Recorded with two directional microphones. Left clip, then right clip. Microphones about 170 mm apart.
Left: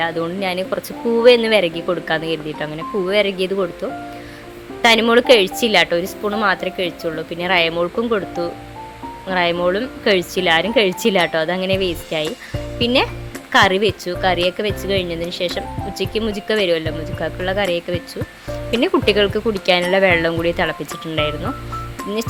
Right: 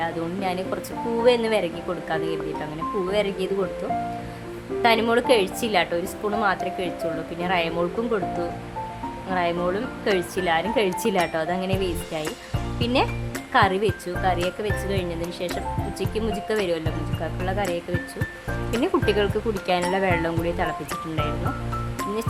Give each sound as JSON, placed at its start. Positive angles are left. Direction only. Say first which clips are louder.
{"t": 0.0, "sound": "a woman's voice", "louder": "left 6 dB", "side_deg": 15}
{"t": 4.8, "sound": "a woman's voice", "louder": "left 7 dB", "side_deg": 20}
{"t": 9.3, "sound": "a woman's voice", "louder": "left 7 dB", "side_deg": 20}